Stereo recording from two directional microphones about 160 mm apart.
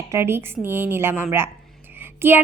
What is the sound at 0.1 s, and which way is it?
A woman's voice, 15° right (ahead or behind).